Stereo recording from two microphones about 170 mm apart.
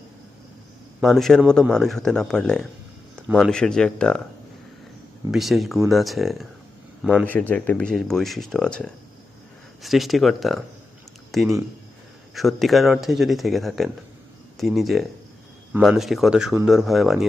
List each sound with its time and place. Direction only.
1.0 s speech: centre (ahead or behind)
5.3 s speech: centre (ahead or behind)
7.3 s speech: 10° left (ahead or behind)